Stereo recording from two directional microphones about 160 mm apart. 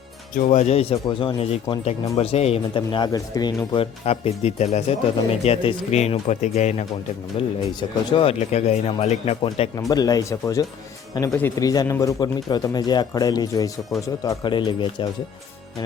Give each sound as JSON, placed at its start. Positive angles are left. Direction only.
{"t": 0.4, "sound": "speech", "side_deg": 45}
{"t": 7.8, "sound": "speech", "side_deg": 35}
{"t": 9.9, "sound": "speech", "side_deg": 25}